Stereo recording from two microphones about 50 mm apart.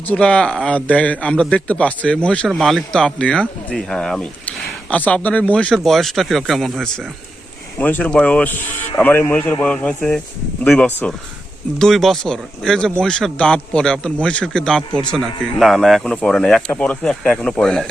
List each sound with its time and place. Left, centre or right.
0.1 s a man's voice: left
2.5 s speech: centre
2.9 s a man's voice: centre
4.4 s speech: left
5.7 s speech: centre
7.8 s a man's voice: left
9.5 s speech: left
10.8 s a man's voice: left
11.8 s a man's voice: centre
15.2 s a man's voice: centre
16.7 s a man's voice: left